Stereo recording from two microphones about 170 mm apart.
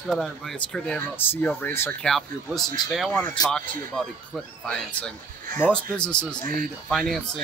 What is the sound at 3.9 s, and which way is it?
Speech, centre (ahead or behind).